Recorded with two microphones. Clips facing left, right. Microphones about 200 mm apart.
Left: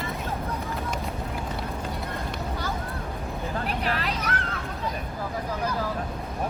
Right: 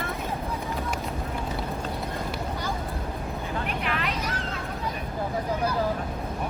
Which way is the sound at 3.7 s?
35° left (ahead or behind).